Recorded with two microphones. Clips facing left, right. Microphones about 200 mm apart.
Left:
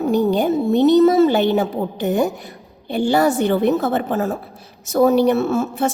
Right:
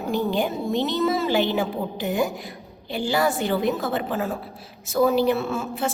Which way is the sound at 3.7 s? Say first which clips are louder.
Left 7 dB; 45° left (ahead or behind).